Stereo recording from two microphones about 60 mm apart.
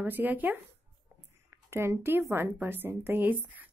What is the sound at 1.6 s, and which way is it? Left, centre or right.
A woman's voice, right.